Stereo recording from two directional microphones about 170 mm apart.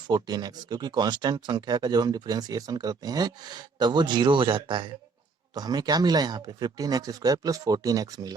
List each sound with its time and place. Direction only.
0.1 s speech: 25° right (ahead or behind)